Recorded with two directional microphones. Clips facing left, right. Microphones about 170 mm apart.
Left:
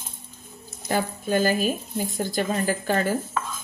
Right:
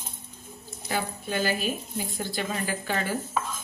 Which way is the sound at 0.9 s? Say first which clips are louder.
Left 6 dB; 45° left (ahead or behind).